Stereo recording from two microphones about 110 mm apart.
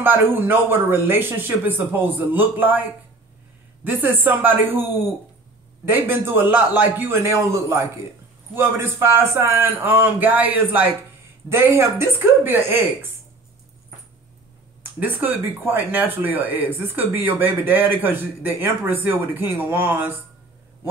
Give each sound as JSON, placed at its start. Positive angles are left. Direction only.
{"t": 0.0, "sound": "speech", "side_deg": -20}
{"t": 3.8, "sound": "speech", "side_deg": -15}
{"t": 15.0, "sound": "speech", "side_deg": -15}